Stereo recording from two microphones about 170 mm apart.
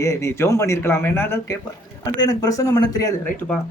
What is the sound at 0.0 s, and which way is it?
A man's voice, 15° left (ahead or behind).